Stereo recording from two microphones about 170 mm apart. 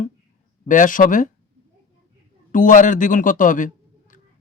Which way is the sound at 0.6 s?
50° left (ahead or behind).